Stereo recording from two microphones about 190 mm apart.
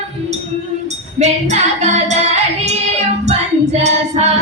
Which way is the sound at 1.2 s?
40° right (ahead or behind).